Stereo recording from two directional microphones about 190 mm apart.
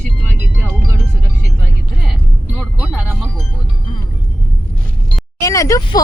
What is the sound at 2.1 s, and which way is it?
Speech, centre (ahead or behind).